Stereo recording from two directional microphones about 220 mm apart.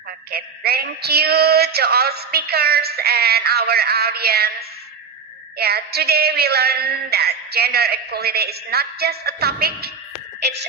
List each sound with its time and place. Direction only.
0.3 s speech: 45° right (ahead or behind)
5.5 s speech: 45° right (ahead or behind)